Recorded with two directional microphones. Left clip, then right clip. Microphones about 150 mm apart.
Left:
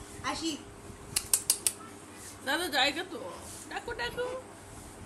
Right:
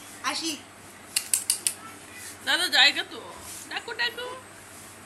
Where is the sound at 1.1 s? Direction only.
55° left (ahead or behind).